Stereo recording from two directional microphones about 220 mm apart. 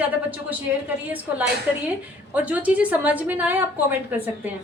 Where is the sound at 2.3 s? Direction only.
5° right (ahead or behind).